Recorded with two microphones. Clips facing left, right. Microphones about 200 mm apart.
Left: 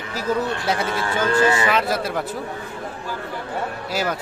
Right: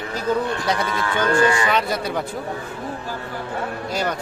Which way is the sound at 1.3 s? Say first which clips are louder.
Even; 25° left (ahead or behind).